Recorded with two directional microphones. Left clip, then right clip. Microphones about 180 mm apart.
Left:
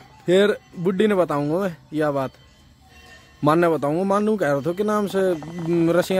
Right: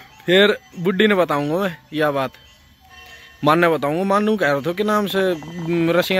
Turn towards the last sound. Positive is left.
turn(degrees=15)  # may be behind; listen again after turning